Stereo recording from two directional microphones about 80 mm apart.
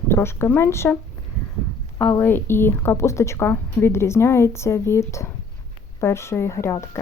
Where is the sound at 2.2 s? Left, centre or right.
Left.